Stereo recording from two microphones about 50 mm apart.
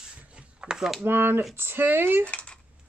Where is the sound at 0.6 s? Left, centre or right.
Centre.